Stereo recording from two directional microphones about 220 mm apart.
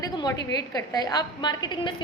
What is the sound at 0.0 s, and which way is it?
A woman's voice, 15° left (ahead or behind).